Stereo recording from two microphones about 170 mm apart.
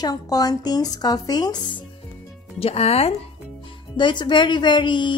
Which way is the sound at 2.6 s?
35° left (ahead or behind).